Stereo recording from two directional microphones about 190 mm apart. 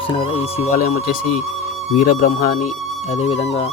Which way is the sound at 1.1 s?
45° left (ahead or behind).